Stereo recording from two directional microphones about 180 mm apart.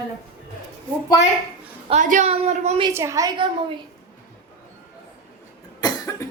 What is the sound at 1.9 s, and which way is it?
Speech, 45° right (ahead or behind).